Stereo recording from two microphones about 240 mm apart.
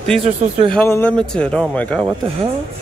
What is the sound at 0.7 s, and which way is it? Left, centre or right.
A man's voice, centre.